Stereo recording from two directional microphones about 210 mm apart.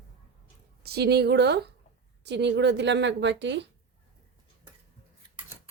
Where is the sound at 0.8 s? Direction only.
50° right (ahead or behind).